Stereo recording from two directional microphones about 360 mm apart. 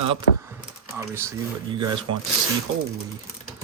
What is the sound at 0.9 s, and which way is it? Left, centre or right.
Speech, centre.